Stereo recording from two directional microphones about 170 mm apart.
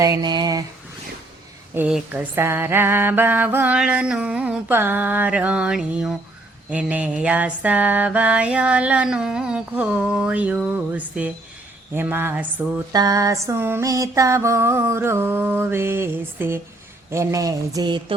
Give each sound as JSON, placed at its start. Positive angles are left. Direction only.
{"t": 0.0, "sound": "speech", "side_deg": -25}
{"t": 1.7, "sound": "mantra", "side_deg": -10}
{"t": 12.9, "sound": "mantra", "side_deg": -20}
{"t": 17.1, "sound": "speech", "side_deg": -20}